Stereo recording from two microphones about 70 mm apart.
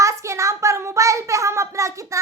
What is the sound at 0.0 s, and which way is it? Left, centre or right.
A child's voice, right.